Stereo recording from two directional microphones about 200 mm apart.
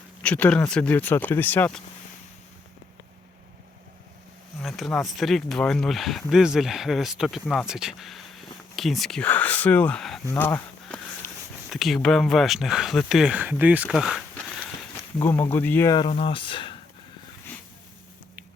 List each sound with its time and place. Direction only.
0.2 s speech: 5° left (ahead or behind)
4.6 s speech: centre (ahead or behind)
10.2 s a sound: 10° left (ahead or behind)
11.7 s speech: centre (ahead or behind)
15.2 s speech: 10° left (ahead or behind)